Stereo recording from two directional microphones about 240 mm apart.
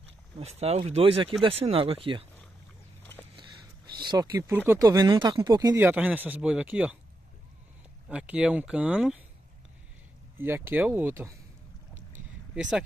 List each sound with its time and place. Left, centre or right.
0.4 s speech: right
4.0 s speech: centre
8.1 s speech: centre
10.3 s speech: centre
12.5 s speech: centre